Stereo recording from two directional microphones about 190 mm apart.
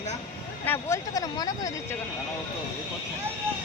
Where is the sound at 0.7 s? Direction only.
15° left (ahead or behind).